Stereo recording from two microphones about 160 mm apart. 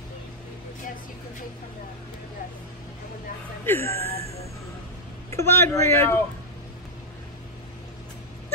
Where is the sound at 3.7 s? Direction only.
15° left (ahead or behind).